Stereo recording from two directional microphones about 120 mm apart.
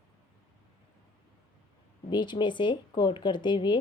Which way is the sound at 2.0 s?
40° left (ahead or behind).